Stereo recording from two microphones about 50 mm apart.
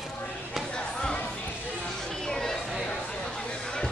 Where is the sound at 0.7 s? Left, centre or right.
Centre.